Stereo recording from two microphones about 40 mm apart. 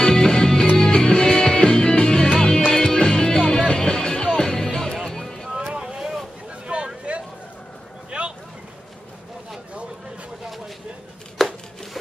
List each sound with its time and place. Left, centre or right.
0.0 s music: centre
5.1 s a sound: centre
5.8 s boat: centre
6.7 s vehicle: right
7.1 s a sound: right
8.1 s vehicle: right
11.3 s chopping: centre